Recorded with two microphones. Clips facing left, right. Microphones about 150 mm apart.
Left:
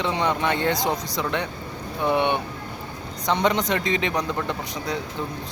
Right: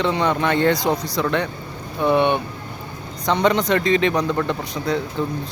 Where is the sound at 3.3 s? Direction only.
15° left (ahead or behind).